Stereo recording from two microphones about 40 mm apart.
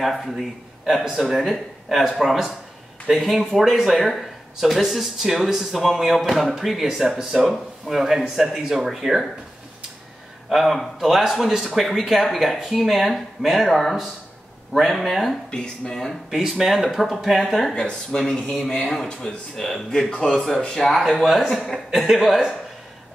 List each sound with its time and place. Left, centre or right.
0.0 s a man's voice: centre
7.4 s speech: centre
10.5 s speech: centre
13.7 s speech: centre
15.5 s speech: left
16.3 s speech: centre; by 20.4 s left
20.7 s speech: centre